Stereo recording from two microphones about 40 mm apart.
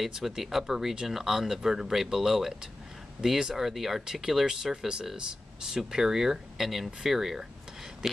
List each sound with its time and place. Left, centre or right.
0.0 s speech: centre